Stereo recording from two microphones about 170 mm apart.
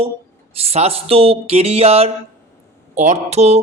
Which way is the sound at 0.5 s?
35° right (ahead or behind).